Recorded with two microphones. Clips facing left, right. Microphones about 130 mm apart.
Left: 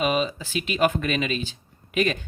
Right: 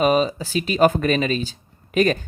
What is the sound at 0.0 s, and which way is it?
Speech, 40° right (ahead or behind).